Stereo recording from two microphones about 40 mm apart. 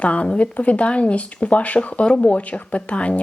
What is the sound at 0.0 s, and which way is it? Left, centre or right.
Speech, left.